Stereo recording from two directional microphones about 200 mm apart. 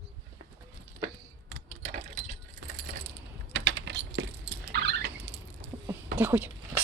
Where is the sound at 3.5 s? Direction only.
60° right (ahead or behind).